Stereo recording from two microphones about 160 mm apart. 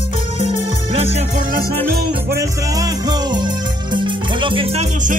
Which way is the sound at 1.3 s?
60° right (ahead or behind).